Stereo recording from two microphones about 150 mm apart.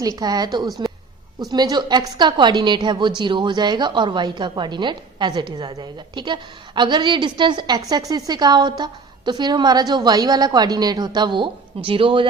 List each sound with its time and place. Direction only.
0.0 s a woman's voice: 25° right (ahead or behind)